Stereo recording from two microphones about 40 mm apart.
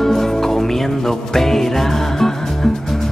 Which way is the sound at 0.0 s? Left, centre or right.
Centre.